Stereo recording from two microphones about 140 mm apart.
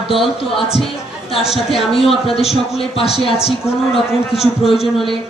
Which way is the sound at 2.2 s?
45° left (ahead or behind).